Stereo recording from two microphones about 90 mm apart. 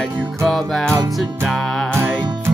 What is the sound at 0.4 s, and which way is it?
Music, 5° left (ahead or behind).